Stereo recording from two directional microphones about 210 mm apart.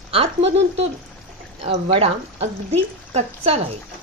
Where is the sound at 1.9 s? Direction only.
25° right (ahead or behind).